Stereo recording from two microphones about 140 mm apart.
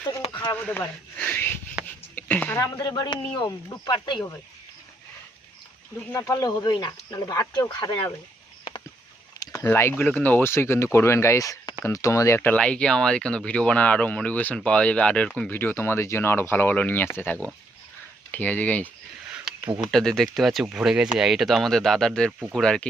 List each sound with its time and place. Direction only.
0.3 s radio: 30° left (ahead or behind)
0.5 s speech: 15° left (ahead or behind)
1.8 s a sound: 5° right (ahead or behind)
2.1 s speech: 10° left (ahead or behind)
2.7 s speech: 25° left (ahead or behind)
6.1 s speech: 25° left (ahead or behind)
9.4 s a sound: 25° left (ahead or behind)
9.6 s speech: 15° left (ahead or behind)
19.9 s speech: 5° left (ahead or behind)
22.3 s speech: 15° right (ahead or behind)
22.5 s speech: 5° left (ahead or behind)